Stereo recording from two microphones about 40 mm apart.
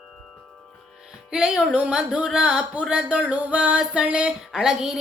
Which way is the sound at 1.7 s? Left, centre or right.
Right.